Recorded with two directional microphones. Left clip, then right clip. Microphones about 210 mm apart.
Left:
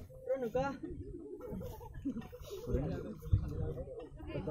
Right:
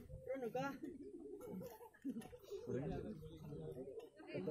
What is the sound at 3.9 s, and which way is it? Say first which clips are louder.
Chatter: left 5 dB; 40° right (ahead or behind).